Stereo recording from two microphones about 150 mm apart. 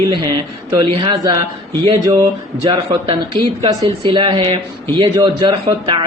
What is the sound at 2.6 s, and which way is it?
A man's voice, 35° right (ahead or behind).